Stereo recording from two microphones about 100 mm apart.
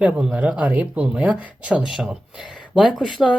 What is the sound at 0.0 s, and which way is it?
Speech, 10° right (ahead or behind).